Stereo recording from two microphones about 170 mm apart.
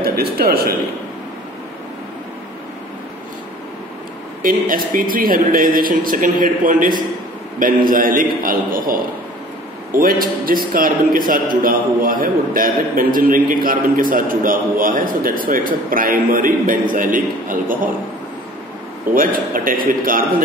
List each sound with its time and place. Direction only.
0.0 s a man's voice: 60° right (ahead or behind)
4.4 s a man's voice: 55° right (ahead or behind)
19.1 s a man's voice: 55° right (ahead or behind)